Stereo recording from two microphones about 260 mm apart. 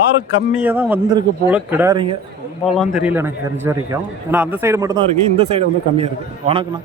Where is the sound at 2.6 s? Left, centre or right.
Centre; by 6.7 s right.